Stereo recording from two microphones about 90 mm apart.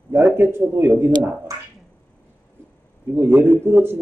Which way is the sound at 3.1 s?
25° right (ahead or behind).